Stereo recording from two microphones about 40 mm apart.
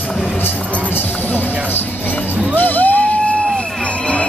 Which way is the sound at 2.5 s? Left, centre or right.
Left.